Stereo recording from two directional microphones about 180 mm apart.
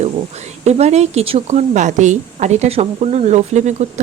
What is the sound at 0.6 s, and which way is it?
A woman's voice, 35° right (ahead or behind).